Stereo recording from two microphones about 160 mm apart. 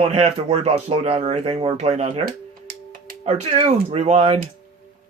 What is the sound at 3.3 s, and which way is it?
Speech, 45° right (ahead or behind).